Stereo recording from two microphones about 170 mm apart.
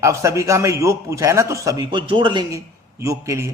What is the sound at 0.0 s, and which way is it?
A man's voice, 15° right (ahead or behind).